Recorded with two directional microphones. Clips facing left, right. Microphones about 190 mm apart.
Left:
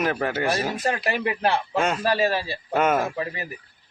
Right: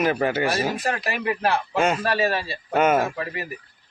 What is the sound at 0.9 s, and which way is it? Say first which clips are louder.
Speech: left 1 dB; 25° left (ahead or behind).